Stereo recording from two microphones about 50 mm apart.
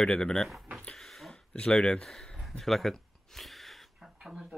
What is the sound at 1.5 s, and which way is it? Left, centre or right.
Speech, centre.